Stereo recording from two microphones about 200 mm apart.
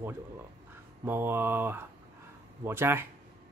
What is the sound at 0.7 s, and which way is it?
Speech, 10° right (ahead or behind).